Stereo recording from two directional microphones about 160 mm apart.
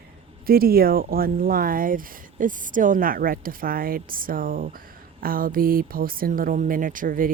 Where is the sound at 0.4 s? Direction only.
70° right (ahead or behind).